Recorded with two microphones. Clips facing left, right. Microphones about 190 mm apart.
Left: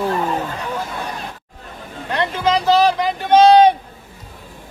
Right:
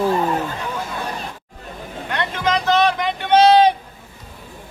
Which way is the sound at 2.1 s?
30° left (ahead or behind).